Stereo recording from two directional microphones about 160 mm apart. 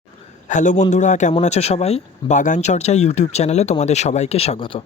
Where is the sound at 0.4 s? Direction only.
50° left (ahead or behind).